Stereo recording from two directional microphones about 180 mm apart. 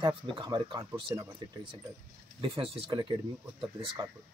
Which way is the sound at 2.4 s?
30° right (ahead or behind).